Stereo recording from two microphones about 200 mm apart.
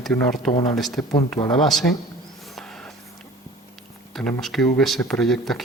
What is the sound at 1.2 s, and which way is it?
Speech, 25° left (ahead or behind).